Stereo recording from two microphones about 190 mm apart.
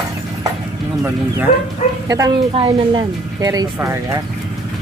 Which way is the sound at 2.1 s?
20° right (ahead or behind).